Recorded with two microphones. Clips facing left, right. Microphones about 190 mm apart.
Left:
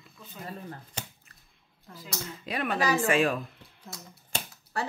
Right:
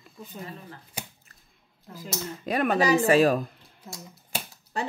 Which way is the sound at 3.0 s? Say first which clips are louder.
Right 5 dB; 40° right (ahead or behind).